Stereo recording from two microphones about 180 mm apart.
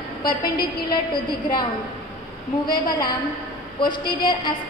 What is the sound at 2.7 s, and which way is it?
A woman's voice, 25° left (ahead or behind).